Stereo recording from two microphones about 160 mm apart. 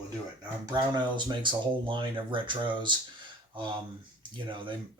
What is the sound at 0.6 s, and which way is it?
Speech, 25° right (ahead or behind).